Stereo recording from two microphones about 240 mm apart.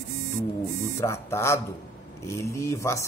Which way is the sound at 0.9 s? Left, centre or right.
Centre.